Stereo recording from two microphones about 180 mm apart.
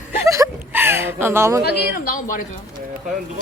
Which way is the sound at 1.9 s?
50° left (ahead or behind).